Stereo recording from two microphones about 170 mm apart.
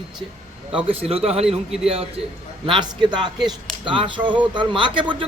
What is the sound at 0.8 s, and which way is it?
Speech, 35° right (ahead or behind).